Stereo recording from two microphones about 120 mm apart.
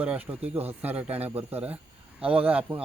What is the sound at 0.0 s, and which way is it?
Speech, 10° right (ahead or behind).